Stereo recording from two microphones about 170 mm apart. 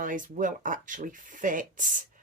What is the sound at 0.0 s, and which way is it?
Speech, 50° right (ahead or behind).